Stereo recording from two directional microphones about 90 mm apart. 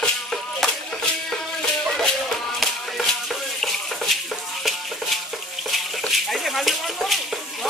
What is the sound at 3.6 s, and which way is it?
Stir, centre (ahead or behind).